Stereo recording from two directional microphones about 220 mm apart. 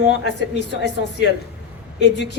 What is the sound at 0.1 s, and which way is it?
Speech, 50° left (ahead or behind).